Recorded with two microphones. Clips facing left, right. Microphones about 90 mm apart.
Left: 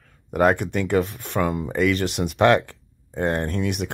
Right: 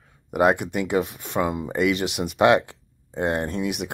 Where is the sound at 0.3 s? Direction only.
10° right (ahead or behind).